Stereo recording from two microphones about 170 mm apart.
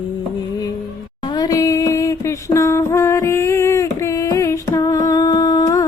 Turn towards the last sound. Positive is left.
turn(degrees=20)  # may be behind; listen again after turning